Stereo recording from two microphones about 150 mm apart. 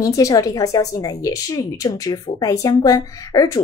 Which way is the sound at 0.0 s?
20° left (ahead or behind).